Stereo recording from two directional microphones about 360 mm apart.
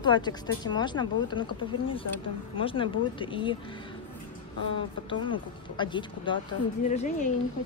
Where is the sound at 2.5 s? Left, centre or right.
Centre.